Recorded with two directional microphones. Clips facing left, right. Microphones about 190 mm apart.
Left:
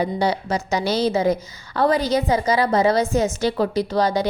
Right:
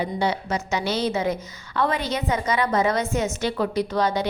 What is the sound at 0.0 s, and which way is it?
A woman's voice, 35° left (ahead or behind).